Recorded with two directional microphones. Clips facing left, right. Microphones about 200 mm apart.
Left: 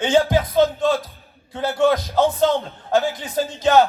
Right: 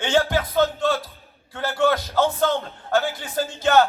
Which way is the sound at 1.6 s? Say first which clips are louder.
Left 3 dB; 20° left (ahead or behind).